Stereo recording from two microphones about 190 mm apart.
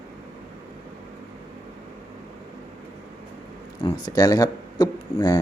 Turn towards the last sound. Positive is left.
turn(degrees=20)  # may be behind; listen again after turning